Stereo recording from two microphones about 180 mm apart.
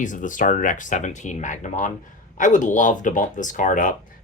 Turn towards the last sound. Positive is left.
turn(degrees=45)  # may be behind; listen again after turning